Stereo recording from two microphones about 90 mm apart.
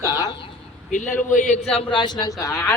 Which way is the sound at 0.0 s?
45° left (ahead or behind).